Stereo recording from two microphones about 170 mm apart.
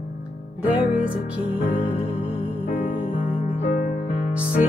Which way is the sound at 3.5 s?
55° left (ahead or behind).